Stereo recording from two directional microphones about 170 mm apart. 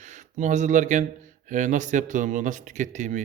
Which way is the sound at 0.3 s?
45° right (ahead or behind).